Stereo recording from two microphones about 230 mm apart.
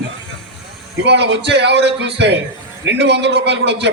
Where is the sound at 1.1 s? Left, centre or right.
Right.